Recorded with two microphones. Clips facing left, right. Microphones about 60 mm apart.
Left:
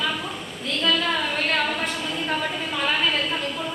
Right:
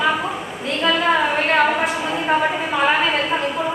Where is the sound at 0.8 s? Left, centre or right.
Right.